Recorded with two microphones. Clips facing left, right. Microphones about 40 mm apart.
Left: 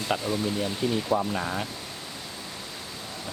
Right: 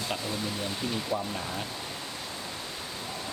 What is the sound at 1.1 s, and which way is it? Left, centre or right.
Speech, left.